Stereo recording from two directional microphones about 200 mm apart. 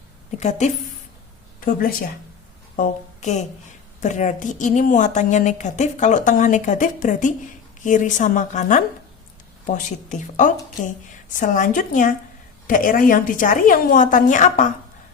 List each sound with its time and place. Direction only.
0.3 s a woman's voice: 35° left (ahead or behind)
2.7 s a woman's voice: 40° left (ahead or behind)